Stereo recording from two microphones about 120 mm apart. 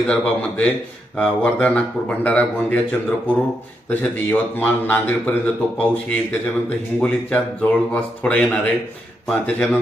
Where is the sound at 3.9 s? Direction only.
15° left (ahead or behind).